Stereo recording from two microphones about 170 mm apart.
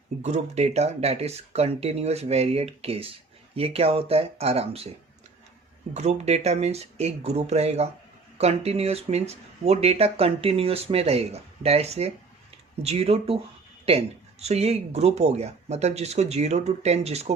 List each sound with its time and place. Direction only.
0.2 s speech: 40° right (ahead or behind)
5.9 s speech: 40° right (ahead or behind)